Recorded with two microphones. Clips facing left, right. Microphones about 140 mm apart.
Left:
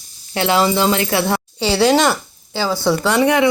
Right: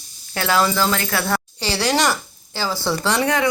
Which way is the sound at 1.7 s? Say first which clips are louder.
Left 6 dB; 5° left (ahead or behind).